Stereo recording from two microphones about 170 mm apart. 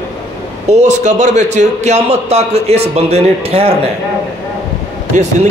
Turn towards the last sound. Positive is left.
turn(degrees=-45)  # may be behind; listen again after turning